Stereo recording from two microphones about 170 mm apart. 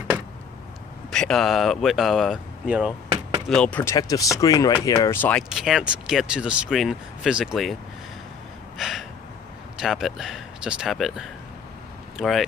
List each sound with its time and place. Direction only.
1.1 s speech: 5° left (ahead or behind)
3.9 s speech: 20° left (ahead or behind)
5.5 s speech: 5° right (ahead or behind)
8.7 s gasp: centre (ahead or behind)
9.8 s speech: centre (ahead or behind)